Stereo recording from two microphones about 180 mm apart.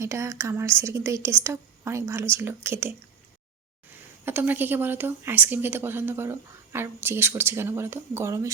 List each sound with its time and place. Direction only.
0.0 s speech: 15° right (ahead or behind)
4.3 s speech: 10° right (ahead or behind)